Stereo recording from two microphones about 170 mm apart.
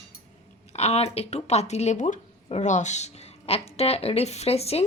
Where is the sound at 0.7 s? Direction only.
40° left (ahead or behind).